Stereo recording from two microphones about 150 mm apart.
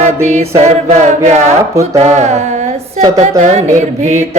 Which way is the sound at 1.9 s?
50° right (ahead or behind).